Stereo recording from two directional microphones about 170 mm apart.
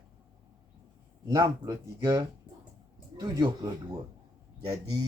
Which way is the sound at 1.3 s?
20° right (ahead or behind).